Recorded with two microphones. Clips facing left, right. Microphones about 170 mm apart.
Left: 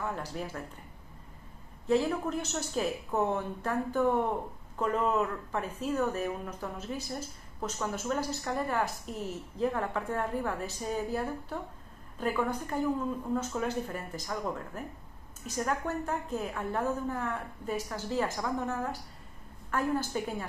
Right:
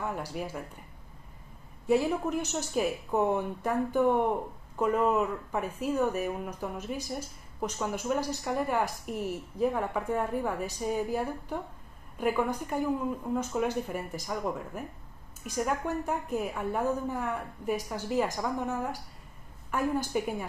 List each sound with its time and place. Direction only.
0.0 s speech: 10° right (ahead or behind)
1.9 s speech: 10° right (ahead or behind)